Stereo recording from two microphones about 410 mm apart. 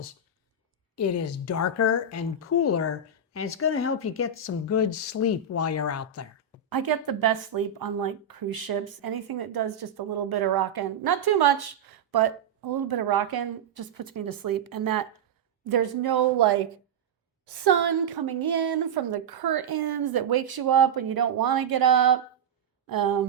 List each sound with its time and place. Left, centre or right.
0.9 s speech: left
6.7 s speech: right